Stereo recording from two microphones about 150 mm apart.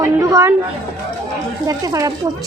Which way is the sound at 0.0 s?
20° right (ahead or behind).